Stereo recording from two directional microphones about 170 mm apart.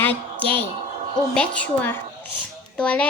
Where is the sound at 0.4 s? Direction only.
35° right (ahead or behind).